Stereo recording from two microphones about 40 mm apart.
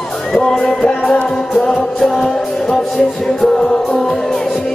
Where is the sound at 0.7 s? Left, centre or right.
Centre.